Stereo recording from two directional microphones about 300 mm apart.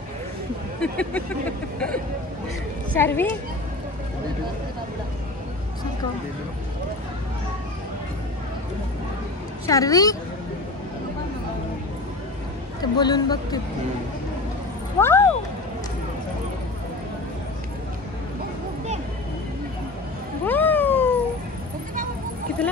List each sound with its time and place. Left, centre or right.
0.7 s a woman's voice: centre
9.7 s a woman's voice: centre
12.9 s a woman's voice: centre
15.0 s speech: centre
20.4 s cat: centre